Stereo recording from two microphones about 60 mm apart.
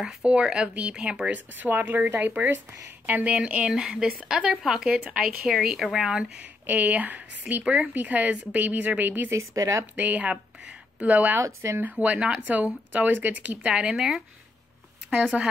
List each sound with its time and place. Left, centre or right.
0.0 s speech: centre
1.6 s speech: right
3.3 s speech: centre
6.0 s speech: centre
6.6 s speech: right
9.3 s speech: right
9.9 s speech: right; by 14.2 s centre
15.3 s speech: centre